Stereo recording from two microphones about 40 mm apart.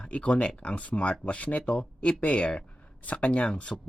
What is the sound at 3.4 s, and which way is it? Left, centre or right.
Speech, left.